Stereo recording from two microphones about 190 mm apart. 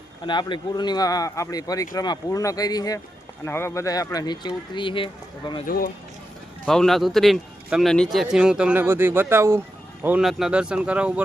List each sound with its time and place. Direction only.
0.3 s speech: 25° left (ahead or behind)
5.6 s speech: 50° left (ahead or behind)
6.7 s a man's voice: centre (ahead or behind)